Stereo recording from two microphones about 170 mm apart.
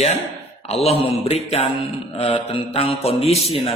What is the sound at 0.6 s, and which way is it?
A man's voice, 35° left (ahead or behind).